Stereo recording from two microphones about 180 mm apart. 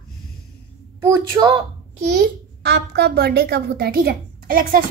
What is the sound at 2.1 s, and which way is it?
A child's voice, 60° right (ahead or behind).